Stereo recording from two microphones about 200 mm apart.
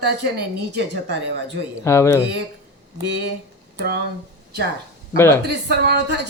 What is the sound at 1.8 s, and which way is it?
Speech, 15° left (ahead or behind).